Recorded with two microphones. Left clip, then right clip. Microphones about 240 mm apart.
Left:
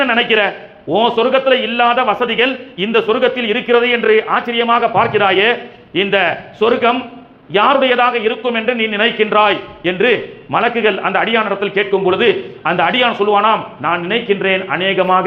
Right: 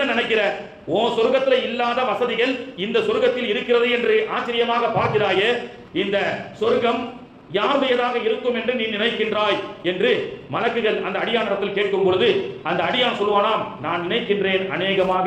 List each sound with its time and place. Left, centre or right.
0.2 s a man's voice: left